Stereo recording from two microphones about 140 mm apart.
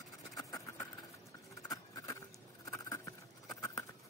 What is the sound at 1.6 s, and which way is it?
Vehicle, 25° left (ahead or behind).